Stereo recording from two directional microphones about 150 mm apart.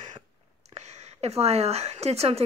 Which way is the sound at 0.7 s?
45° right (ahead or behind).